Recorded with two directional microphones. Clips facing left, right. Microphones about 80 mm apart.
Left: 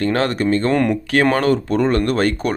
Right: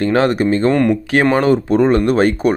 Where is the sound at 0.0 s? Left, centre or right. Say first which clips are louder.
Right 4 dB; right.